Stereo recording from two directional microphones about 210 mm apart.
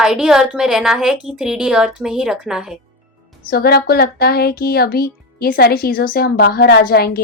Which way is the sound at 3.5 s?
45° left (ahead or behind).